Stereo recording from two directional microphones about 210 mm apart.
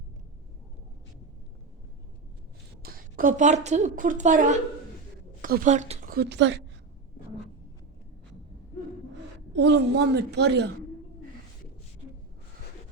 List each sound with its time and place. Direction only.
2.8 s a woman's voice: 45° right (ahead or behind)
6.1 s speech: 55° right (ahead or behind)
9.6 s a woman's voice: 55° right (ahead or behind)